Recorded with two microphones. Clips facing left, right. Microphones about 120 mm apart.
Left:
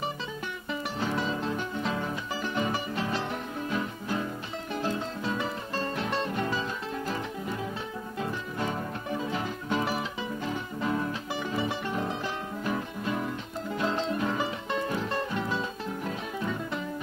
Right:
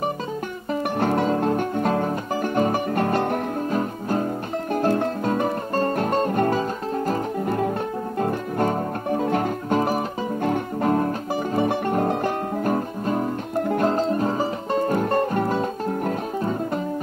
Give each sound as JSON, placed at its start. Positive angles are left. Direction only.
{"t": 0.9, "sound": "music", "side_deg": -55}
{"t": 13.6, "sound": "music", "side_deg": -55}